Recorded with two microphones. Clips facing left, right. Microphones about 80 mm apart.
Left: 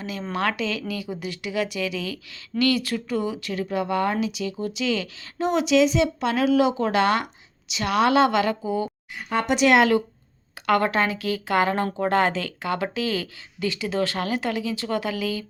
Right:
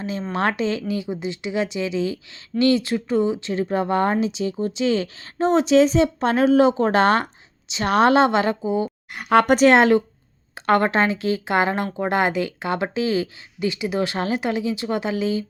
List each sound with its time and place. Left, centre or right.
0.0 s a woman's voice: right
9.1 s speech: right
9.6 s a woman's voice: right